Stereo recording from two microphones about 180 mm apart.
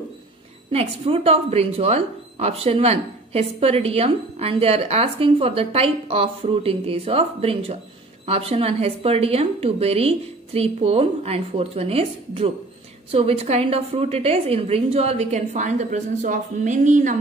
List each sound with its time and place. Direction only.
0.7 s speech: 30° right (ahead or behind)